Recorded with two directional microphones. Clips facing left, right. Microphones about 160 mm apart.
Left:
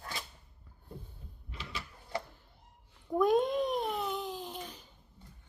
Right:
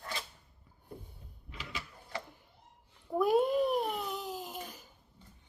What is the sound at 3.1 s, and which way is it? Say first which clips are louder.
Babbling: even; 5° right (ahead or behind).